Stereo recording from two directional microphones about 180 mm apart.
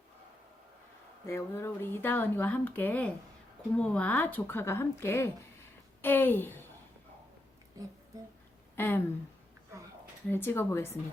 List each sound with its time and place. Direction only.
1.3 s a woman's voice: 15° left (ahead or behind)
7.8 s speech: 20° right (ahead or behind)
8.7 s a sound: 15° left (ahead or behind)
10.2 s speech: 10° left (ahead or behind)